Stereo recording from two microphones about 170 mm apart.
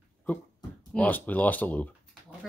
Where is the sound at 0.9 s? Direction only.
10° left (ahead or behind).